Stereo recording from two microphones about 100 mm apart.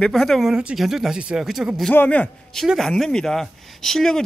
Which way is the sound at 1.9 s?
15° left (ahead or behind).